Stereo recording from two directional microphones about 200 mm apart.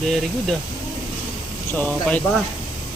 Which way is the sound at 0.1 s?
Centre (ahead or behind).